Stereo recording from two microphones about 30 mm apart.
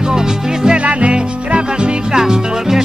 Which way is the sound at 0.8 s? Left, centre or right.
Right.